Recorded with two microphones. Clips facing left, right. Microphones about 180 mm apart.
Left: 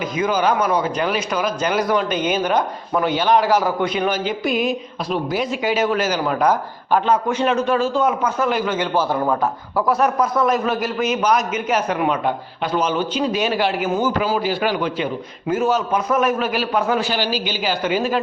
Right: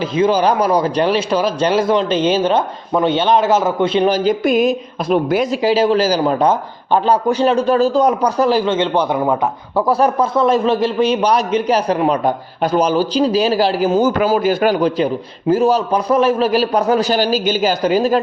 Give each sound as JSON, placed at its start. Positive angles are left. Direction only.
{"t": 0.2, "sound": "a man's voice", "side_deg": -35}
{"t": 5.5, "sound": "a man's voice", "side_deg": -30}
{"t": 9.1, "sound": "a man's voice", "side_deg": -15}
{"t": 14.2, "sound": "a man's voice", "side_deg": -50}